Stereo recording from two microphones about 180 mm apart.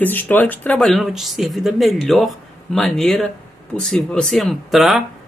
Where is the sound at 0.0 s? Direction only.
10° left (ahead or behind).